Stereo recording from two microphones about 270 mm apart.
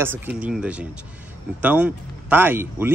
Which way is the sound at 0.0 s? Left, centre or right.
Centre.